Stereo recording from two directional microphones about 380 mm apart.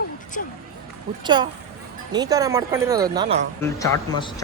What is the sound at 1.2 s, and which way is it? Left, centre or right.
Speech, centre.